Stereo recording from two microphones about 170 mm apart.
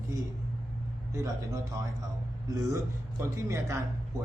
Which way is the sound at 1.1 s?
20° right (ahead or behind).